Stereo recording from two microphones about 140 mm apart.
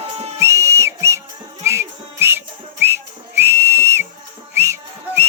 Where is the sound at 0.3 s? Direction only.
20° right (ahead or behind).